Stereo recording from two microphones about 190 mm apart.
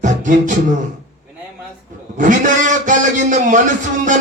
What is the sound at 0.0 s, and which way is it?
Beatboxing, 40° right (ahead or behind).